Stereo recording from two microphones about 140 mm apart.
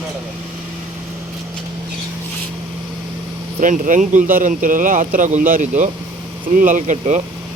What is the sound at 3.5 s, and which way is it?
Speech, 70° right (ahead or behind).